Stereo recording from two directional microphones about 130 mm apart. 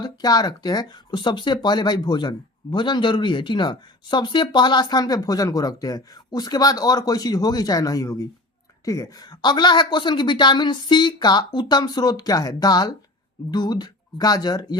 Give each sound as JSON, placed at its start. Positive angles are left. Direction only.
{"t": 0.0, "sound": "speech", "side_deg": 30}